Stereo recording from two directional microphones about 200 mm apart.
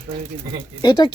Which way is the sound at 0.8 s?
20° left (ahead or behind).